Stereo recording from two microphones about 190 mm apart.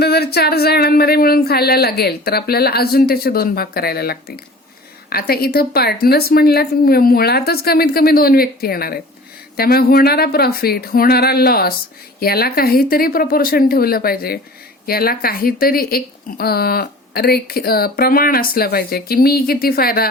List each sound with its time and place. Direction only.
0.0 s speech: 55° left (ahead or behind)